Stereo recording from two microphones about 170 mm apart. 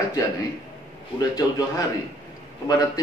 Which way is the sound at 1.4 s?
20° left (ahead or behind).